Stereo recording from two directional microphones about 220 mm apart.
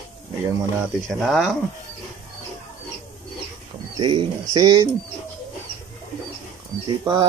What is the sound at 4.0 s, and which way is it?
Speech, 20° right (ahead or behind).